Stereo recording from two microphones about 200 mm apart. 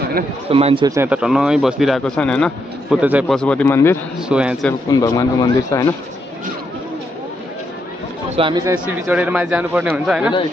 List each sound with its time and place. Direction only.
0.5 s a man's voice: 30° right (ahead or behind)
0.8 s speech: 10° right (ahead or behind); by 3.0 s 5° left (ahead or behind)
3.0 s speech: 5° right (ahead or behind)
3.3 s speech: 5° left (ahead or behind)
4.2 s speech: 5° right (ahead or behind)
4.8 s speech: 20° left (ahead or behind)
8.4 s a man's voice: 20° right (ahead or behind)
8.7 s speech: 5° right (ahead or behind)